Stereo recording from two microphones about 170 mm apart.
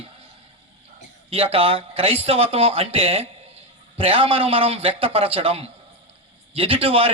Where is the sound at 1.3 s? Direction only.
35° right (ahead or behind).